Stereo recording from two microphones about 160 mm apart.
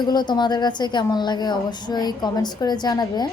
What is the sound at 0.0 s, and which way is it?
A woman's voice, 25° left (ahead or behind).